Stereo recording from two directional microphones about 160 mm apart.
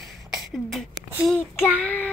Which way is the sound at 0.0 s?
Centre (ahead or behind).